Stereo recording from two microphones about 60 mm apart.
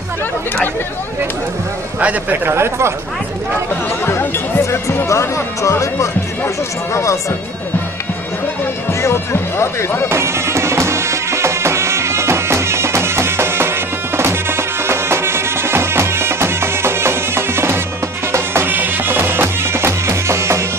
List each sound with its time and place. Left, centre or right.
2.0 s speech: right
2.4 s speech: right
4.0 s chatter: left
4.6 s speech: left
9.0 s speech: left
10.0 s music: right